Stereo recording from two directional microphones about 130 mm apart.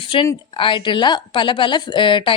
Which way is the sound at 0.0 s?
45° left (ahead or behind).